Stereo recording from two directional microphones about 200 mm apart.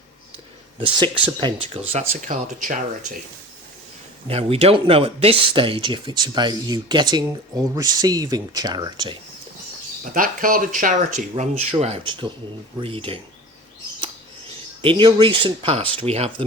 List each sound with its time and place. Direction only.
0.8 s speech: 25° right (ahead or behind)
4.3 s speech: 30° right (ahead or behind)
10.0 s speech: 45° right (ahead or behind)
14.8 s speech: 25° right (ahead or behind)